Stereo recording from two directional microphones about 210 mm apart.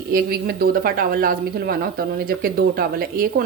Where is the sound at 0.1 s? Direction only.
45° right (ahead or behind).